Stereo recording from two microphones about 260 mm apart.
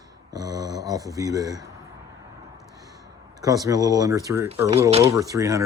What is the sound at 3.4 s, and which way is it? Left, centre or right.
Speech, centre.